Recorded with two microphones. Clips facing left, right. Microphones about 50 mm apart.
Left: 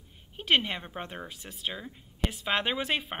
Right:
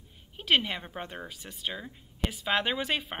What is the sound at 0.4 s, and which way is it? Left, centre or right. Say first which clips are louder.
A woman's voice: even; centre.